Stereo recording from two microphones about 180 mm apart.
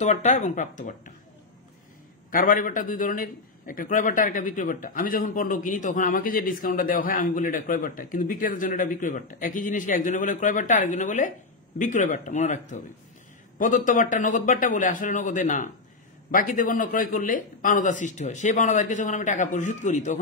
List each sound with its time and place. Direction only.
0.0 s speech: 40° left (ahead or behind)
2.3 s a man's voice: 50° left (ahead or behind)